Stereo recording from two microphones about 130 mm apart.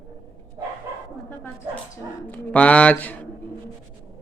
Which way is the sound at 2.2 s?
15° left (ahead or behind).